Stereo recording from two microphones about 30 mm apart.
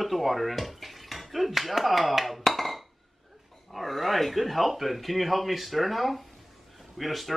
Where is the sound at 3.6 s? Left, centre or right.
Centre.